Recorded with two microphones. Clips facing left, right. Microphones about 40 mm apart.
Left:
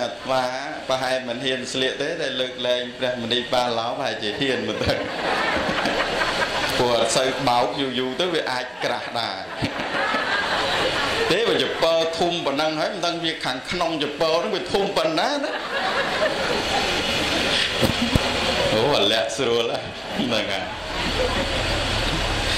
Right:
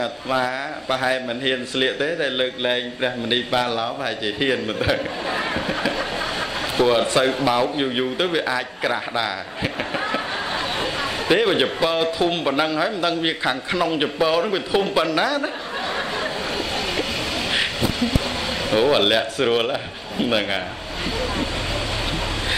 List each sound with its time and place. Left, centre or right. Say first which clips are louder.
0.0 s a man's voice: right 1 dB; right
6.8 s a man's voice: right 3 dB; centre
11.2 s a man's voice: right 5 dB; centre
18.0 s a sound: left 1 dB; left
18.8 s a man's voice: right 5 dB; centre